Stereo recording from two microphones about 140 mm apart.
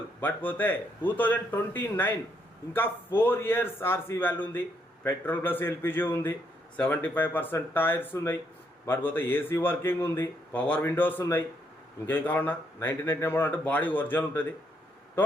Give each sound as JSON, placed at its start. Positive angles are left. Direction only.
{"t": 0.2, "sound": "a man's voice", "side_deg": 15}